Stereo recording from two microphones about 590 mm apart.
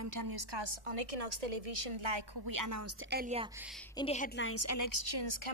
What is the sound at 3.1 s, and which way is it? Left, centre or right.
Speech, centre.